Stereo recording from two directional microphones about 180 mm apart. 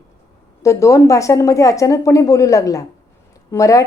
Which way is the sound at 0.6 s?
15° left (ahead or behind).